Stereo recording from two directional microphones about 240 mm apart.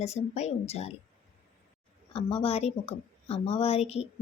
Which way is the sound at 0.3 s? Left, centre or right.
Left.